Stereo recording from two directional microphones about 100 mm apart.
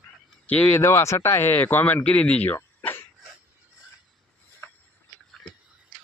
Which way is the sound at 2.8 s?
20° left (ahead or behind).